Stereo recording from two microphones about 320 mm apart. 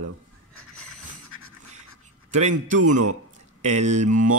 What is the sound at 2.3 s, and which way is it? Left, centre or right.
A man's voice, right.